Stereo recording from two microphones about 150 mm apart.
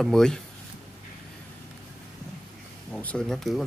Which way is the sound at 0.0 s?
5° left (ahead or behind).